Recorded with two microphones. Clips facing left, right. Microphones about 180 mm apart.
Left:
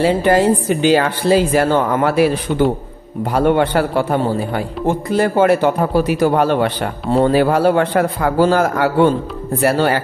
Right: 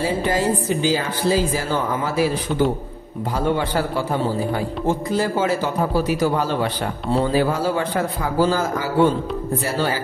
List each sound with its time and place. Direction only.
0.0 s a woman's voice: 65° left (ahead or behind)
3.3 s a man's voice: 65° left (ahead or behind)